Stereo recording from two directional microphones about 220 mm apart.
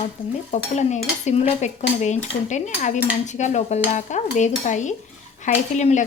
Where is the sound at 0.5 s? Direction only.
30° left (ahead or behind).